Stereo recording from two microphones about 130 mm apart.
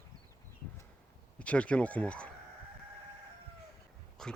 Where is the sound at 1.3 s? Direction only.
10° left (ahead or behind).